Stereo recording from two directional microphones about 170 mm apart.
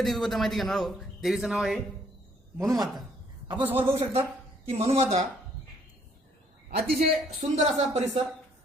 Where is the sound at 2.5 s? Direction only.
20° right (ahead or behind).